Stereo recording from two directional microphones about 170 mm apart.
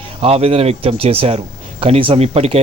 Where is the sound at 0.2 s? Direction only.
35° right (ahead or behind).